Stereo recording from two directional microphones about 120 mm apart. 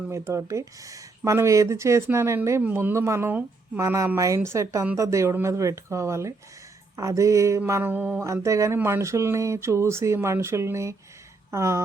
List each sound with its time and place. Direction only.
0.1 s speech: 25° right (ahead or behind)